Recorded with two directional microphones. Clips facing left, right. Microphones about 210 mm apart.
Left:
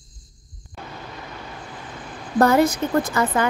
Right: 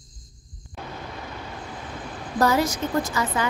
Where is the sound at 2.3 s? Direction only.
55° left (ahead or behind).